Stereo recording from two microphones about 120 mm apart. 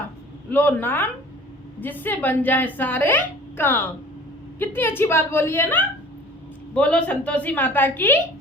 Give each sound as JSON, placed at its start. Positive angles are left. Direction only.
{"t": 0.5, "sound": "a woman's voice", "side_deg": 15}